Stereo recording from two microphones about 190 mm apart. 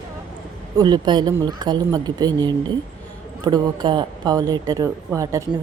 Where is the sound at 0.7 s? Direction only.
25° right (ahead or behind).